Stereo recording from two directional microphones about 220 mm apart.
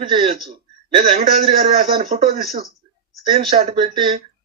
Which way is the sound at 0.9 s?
30° right (ahead or behind).